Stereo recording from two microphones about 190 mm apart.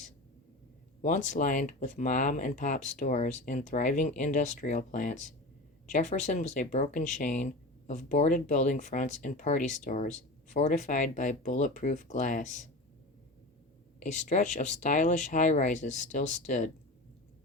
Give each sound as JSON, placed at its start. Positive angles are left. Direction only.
{"t": 1.0, "sound": "speech", "side_deg": 40}
{"t": 14.0, "sound": "speech", "side_deg": 40}